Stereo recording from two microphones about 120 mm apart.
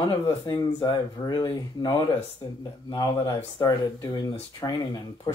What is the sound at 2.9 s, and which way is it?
Speech, 35° left (ahead or behind).